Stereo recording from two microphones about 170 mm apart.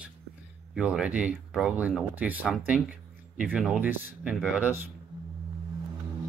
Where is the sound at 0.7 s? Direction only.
5° right (ahead or behind).